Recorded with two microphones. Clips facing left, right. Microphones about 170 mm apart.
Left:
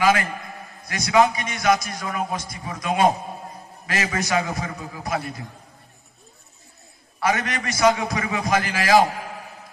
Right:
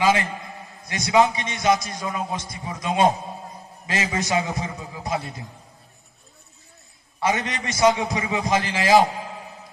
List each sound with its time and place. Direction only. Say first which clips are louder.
0.0 s a man's voice: left 1 dB; 25° right (ahead or behind)
7.2 s a man's voice: left 1 dB; 20° right (ahead or behind)